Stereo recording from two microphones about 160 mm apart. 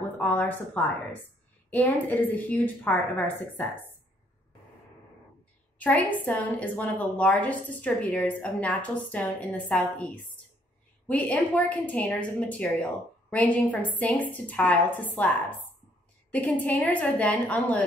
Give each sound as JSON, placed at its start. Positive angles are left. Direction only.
{"t": 0.2, "sound": "a woman's voice", "side_deg": 10}
{"t": 5.8, "sound": "a woman's voice", "side_deg": 10}